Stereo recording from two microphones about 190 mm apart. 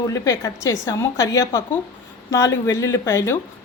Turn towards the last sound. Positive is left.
turn(degrees=15)  # may be behind; listen again after turning